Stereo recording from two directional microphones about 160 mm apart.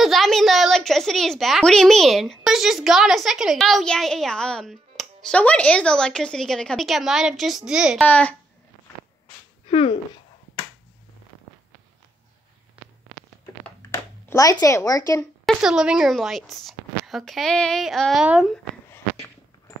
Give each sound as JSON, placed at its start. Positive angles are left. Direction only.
{"t": 0.0, "sound": "a child's voice", "side_deg": 0}
{"t": 8.0, "sound": "a child's voice", "side_deg": 10}
{"t": 9.7, "sound": "speech", "side_deg": 40}
{"t": 13.7, "sound": "a sound", "side_deg": 20}
{"t": 15.4, "sound": "a child's voice", "side_deg": -5}